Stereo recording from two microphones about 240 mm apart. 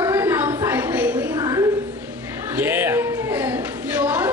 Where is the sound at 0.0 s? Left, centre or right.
Centre.